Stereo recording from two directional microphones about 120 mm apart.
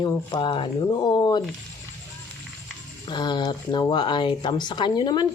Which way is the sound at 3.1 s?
40° left (ahead or behind).